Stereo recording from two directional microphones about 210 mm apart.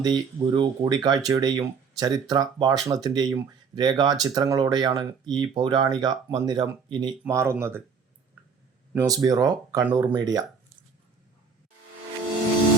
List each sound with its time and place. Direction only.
0.0 s speech: 20° right (ahead or behind)
8.9 s speech: 15° right (ahead or behind)